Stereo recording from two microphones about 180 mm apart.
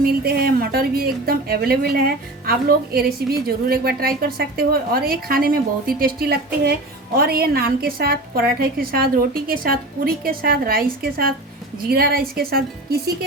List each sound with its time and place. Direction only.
0.0 s a woman's voice: 60° right (ahead or behind)